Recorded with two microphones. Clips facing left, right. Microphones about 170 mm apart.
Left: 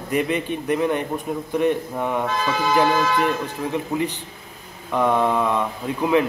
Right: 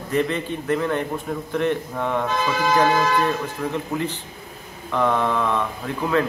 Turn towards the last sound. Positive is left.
turn(degrees=15)  # may be behind; listen again after turning